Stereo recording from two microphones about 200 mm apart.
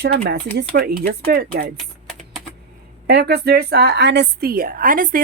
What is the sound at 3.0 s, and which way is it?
A woman's voice, 55° right (ahead or behind).